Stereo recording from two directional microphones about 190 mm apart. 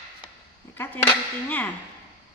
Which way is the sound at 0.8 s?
10° left (ahead or behind).